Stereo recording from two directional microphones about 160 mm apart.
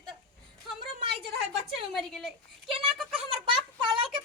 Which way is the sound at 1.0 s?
30° right (ahead or behind).